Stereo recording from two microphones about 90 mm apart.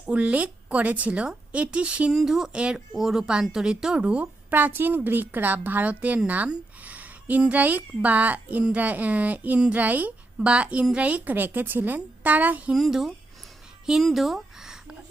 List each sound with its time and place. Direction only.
0.1 s a woman's voice: 15° right (ahead or behind)
12.7 s a woman's voice: 5° right (ahead or behind)
13.8 s a sound: 5° right (ahead or behind)